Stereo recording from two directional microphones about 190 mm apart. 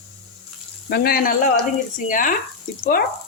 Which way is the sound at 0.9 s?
55° left (ahead or behind).